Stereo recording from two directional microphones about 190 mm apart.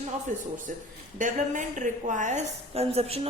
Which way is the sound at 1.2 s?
40° right (ahead or behind).